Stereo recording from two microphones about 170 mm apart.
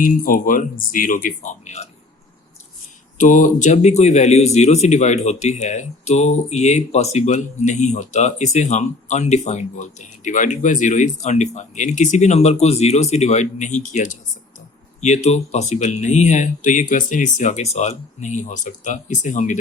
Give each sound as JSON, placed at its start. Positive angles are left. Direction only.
{"t": 0.0, "sound": "speech", "side_deg": 55}
{"t": 3.2, "sound": "speech", "side_deg": 50}